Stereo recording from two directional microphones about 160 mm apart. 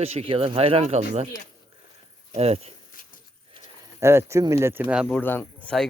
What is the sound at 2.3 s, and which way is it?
Speech, 40° right (ahead or behind).